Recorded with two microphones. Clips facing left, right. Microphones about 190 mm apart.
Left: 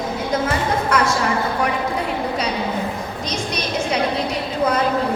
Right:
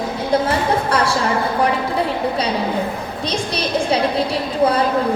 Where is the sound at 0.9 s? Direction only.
30° right (ahead or behind).